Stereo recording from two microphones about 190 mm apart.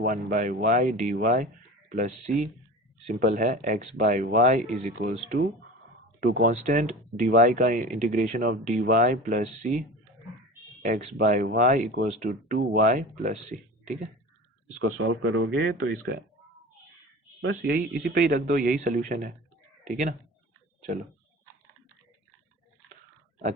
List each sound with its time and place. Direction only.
0.0 s speech: 45° right (ahead or behind)
6.1 s speech: 50° right (ahead or behind)
10.8 s speech: 45° right (ahead or behind)
14.8 s speech: 90° right
17.4 s speech: 60° right (ahead or behind)
20.8 s speech: 45° right (ahead or behind)